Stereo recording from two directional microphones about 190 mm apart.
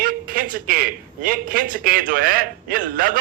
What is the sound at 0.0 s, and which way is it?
A man's voice, 50° right (ahead or behind).